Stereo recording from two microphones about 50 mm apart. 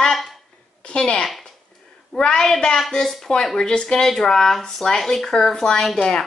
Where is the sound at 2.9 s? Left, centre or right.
Centre.